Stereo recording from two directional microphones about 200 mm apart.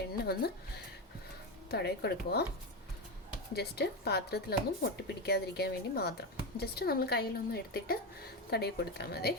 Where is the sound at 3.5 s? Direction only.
55° left (ahead or behind).